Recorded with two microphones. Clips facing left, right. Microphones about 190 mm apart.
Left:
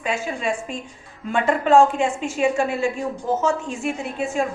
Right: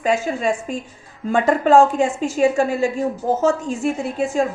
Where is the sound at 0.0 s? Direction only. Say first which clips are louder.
Right 5 dB; 40° right (ahead or behind).